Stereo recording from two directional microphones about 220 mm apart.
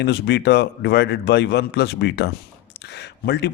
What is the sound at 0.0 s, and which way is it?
Speech, 50° left (ahead or behind).